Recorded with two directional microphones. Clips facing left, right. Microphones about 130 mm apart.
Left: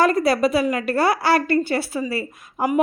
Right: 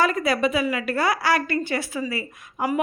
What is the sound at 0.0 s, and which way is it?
A woman's voice, 35° left (ahead or behind).